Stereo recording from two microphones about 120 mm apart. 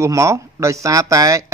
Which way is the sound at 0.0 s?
25° right (ahead or behind).